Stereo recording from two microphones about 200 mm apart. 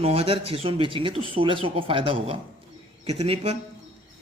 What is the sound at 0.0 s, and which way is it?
Speech, 30° right (ahead or behind).